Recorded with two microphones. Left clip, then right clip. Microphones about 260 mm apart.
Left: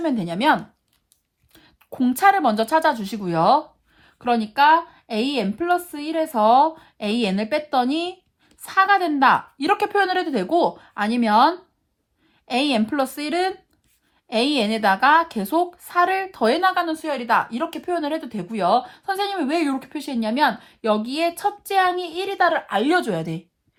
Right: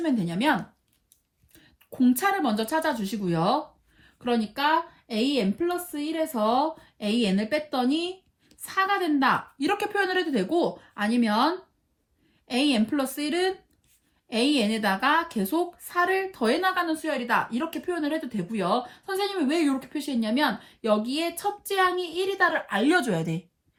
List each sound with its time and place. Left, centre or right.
0.0 s speech: left
1.5 s speech: left